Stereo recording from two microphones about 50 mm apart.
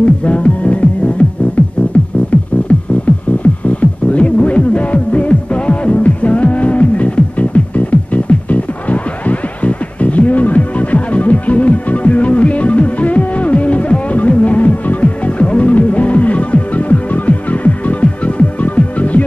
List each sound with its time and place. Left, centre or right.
0.0 s music: left